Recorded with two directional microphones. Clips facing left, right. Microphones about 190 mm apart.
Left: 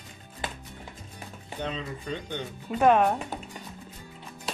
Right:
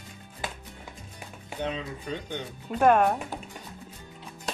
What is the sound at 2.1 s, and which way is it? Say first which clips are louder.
Speech: even; 5° right (ahead or behind).